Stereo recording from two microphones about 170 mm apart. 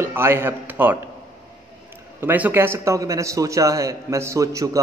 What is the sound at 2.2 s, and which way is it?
A man's voice, 10° right (ahead or behind).